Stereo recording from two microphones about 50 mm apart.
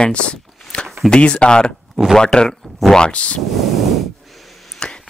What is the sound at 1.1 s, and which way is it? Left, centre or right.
Speech, centre.